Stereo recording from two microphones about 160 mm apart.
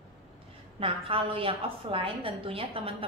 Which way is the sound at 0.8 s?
35° right (ahead or behind).